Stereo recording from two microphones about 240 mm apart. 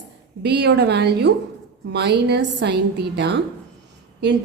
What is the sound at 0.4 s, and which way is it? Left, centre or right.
A woman's voice, right.